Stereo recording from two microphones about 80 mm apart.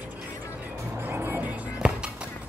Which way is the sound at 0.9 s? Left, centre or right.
Right.